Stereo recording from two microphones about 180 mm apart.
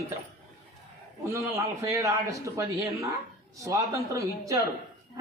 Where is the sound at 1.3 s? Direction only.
15° right (ahead or behind).